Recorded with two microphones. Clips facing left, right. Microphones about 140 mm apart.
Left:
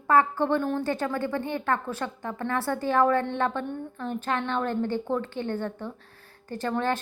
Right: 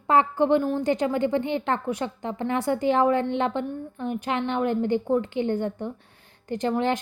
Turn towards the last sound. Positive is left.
turn(degrees=-15)  # may be behind; listen again after turning